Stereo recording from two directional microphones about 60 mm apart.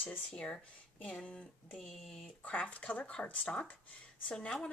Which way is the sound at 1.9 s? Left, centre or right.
Centre.